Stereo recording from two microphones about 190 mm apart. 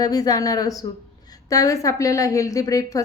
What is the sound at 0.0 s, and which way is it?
A woman's voice, 20° left (ahead or behind).